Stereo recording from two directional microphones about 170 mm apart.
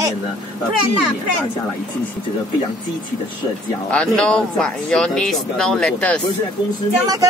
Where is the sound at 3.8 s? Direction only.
5° left (ahead or behind).